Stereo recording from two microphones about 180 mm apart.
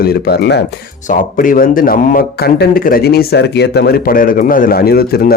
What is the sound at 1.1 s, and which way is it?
A man's voice, 50° left (ahead or behind).